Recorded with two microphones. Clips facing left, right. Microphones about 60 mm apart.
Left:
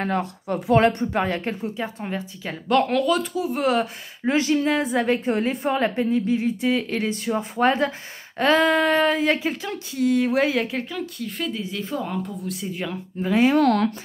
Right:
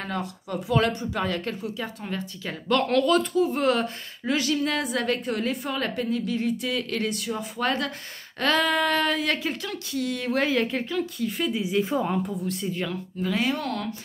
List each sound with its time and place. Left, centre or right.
0.0 s a woman's voice: left; by 4.3 s centre
4.3 s a woman's voice: left
7.2 s speech: left
8.4 s a woman's voice: centre
12.4 s speech: centre
13.2 s a woman's voice: left
13.6 s speech: left